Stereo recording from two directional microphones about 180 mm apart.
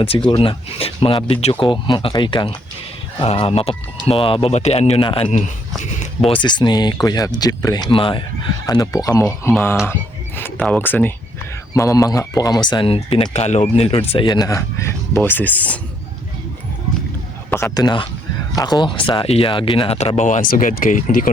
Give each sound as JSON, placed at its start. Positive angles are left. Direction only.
{"t": 0.3, "sound": "speech", "side_deg": 30}
{"t": 17.5, "sound": "speech", "side_deg": 15}